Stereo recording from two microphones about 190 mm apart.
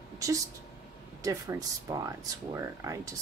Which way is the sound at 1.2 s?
15° right (ahead or behind).